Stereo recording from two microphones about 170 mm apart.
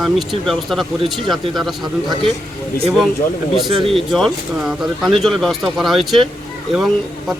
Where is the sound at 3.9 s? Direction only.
Centre (ahead or behind).